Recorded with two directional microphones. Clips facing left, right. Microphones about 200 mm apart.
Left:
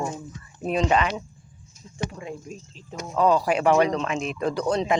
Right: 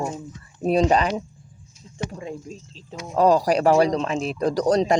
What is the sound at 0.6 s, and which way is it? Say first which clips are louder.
Speech: right 4 dB; 40° right (ahead or behind).